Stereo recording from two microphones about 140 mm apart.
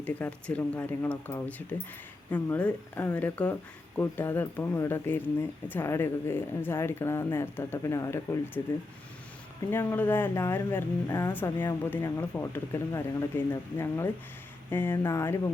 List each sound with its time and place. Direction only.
0.0 s speech: 10° left (ahead or behind)
9.6 s speech: 15° left (ahead or behind)